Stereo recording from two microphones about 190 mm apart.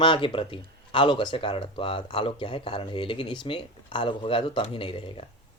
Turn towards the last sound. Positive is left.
turn(degrees=25)  # may be behind; listen again after turning